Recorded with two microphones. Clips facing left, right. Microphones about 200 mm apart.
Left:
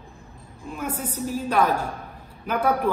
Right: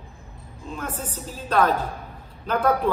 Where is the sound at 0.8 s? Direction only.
10° left (ahead or behind).